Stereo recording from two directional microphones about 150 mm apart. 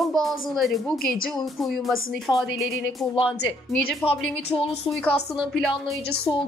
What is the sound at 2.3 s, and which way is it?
Speech, centre (ahead or behind).